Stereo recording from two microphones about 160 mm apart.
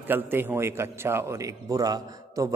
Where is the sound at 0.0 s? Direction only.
15° right (ahead or behind).